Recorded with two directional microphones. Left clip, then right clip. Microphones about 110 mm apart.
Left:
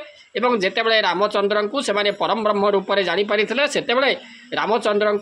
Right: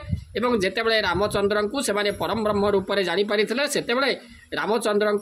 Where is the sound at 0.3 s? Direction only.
35° right (ahead or behind).